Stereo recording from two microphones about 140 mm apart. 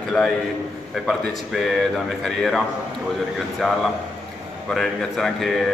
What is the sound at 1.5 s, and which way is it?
Speech, centre (ahead or behind).